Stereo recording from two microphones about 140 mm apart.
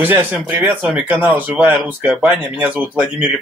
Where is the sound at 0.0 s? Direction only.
15° right (ahead or behind).